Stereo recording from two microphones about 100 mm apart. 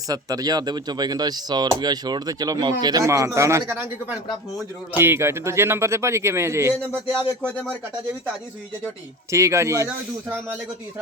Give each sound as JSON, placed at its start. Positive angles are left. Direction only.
{"t": 0.1, "sound": "speech", "side_deg": -40}
{"t": 3.0, "sound": "a man's voice", "side_deg": -30}
{"t": 3.7, "sound": "a man's voice", "side_deg": -20}
{"t": 9.3, "sound": "a man's voice", "side_deg": -30}